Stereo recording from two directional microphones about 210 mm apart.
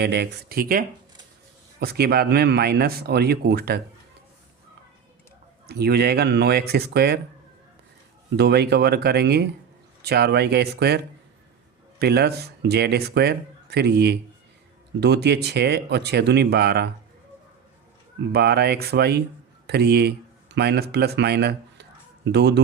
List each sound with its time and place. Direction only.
0.0 s speech: 55° right (ahead or behind)
5.6 s speech: 50° right (ahead or behind)
8.4 s speech: 50° right (ahead or behind)
18.3 s speech: 50° right (ahead or behind)